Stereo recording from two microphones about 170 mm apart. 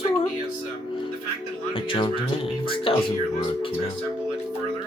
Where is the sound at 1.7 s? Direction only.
30° left (ahead or behind).